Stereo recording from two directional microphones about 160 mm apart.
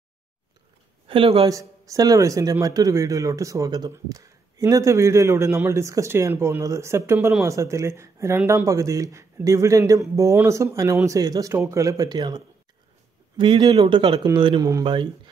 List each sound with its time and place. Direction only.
1.0 s speech: 35° right (ahead or behind)
1.5 s a man's voice: 20° right (ahead or behind)